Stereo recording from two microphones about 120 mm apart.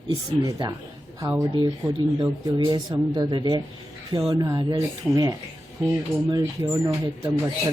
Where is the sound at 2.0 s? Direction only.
40° right (ahead or behind).